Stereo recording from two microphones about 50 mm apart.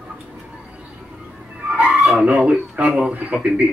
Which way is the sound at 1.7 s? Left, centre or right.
Right.